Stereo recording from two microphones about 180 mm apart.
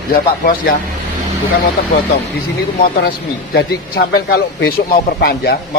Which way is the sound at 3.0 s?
60° left (ahead or behind).